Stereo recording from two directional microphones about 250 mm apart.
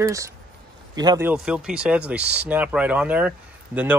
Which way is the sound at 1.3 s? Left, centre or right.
Centre.